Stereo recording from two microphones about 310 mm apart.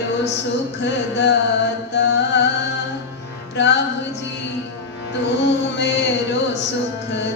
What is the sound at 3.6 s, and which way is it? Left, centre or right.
Music, left.